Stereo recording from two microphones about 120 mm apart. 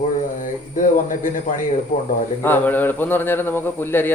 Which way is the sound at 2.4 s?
15° left (ahead or behind).